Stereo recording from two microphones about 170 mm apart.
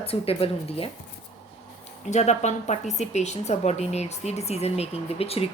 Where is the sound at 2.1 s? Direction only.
45° left (ahead or behind).